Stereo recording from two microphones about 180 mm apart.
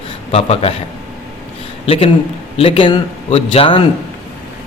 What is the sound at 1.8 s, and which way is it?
A man's voice, 35° left (ahead or behind).